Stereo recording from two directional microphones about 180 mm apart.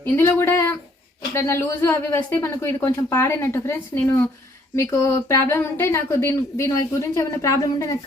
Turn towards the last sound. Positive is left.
turn(degrees=20)  # may be behind; listen again after turning